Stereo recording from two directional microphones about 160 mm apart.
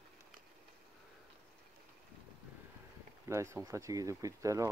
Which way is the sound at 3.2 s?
15° right (ahead or behind).